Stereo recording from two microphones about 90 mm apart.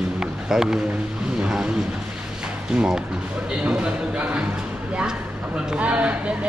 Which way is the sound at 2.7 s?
10° right (ahead or behind).